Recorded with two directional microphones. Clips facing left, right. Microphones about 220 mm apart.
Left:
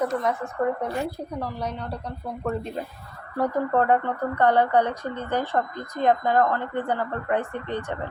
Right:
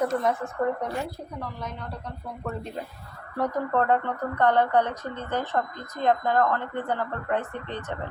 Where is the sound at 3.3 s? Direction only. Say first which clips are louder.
Left 3 dB; 10° left (ahead or behind).